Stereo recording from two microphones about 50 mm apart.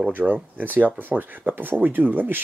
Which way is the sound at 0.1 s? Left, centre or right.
Right.